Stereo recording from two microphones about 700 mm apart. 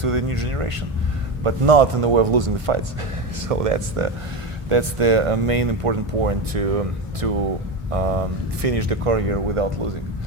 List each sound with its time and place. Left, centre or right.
0.0 s speech: right